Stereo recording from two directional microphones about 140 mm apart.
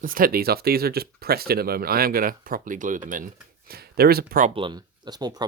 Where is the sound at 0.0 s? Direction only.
90° right; by 3.2 s 70° right (ahead or behind).